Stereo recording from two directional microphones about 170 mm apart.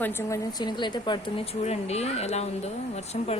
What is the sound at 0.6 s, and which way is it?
Speech, 25° left (ahead or behind).